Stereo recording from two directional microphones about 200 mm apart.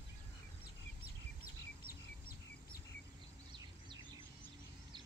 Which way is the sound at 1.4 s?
45° left (ahead or behind).